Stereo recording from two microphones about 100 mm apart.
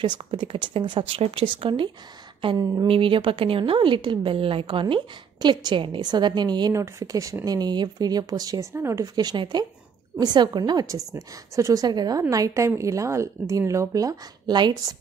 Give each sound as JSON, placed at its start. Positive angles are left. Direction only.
{"t": 0.0, "sound": "a woman's voice", "side_deg": -50}
{"t": 2.5, "sound": "a woman's voice", "side_deg": -40}
{"t": 2.9, "sound": "a woman's voice", "side_deg": -60}
{"t": 6.7, "sound": "a woman's voice", "side_deg": -30}
{"t": 8.7, "sound": "speech", "side_deg": -25}
{"t": 9.0, "sound": "speech", "side_deg": -45}
{"t": 11.1, "sound": "a woman's voice", "side_deg": -35}